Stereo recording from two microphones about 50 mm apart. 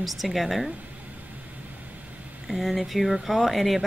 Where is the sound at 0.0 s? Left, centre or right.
Centre.